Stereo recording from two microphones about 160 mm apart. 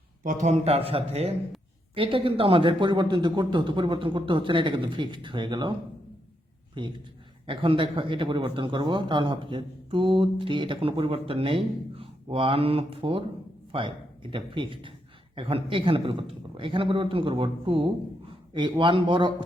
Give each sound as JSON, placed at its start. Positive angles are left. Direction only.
{"t": 0.2, "sound": "speech", "side_deg": -50}
{"t": 6.8, "sound": "a man's voice", "side_deg": -30}